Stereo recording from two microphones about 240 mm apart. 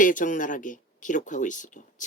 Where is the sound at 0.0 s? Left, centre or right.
Left.